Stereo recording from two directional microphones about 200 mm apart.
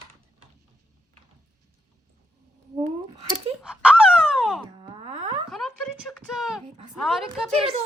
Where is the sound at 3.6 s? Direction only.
5° right (ahead or behind).